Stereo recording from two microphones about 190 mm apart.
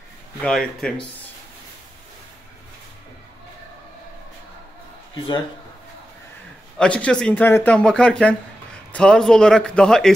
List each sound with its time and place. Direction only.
0.4 s speech: centre (ahead or behind)
5.1 s speech: 25° left (ahead or behind)
6.8 s speech: 5° left (ahead or behind)